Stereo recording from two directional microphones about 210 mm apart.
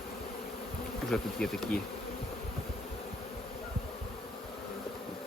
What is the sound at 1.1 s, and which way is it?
Speech, centre (ahead or behind).